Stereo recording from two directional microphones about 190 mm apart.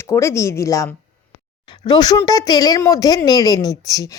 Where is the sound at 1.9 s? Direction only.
20° left (ahead or behind).